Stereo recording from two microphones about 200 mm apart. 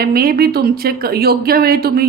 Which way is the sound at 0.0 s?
50° right (ahead or behind).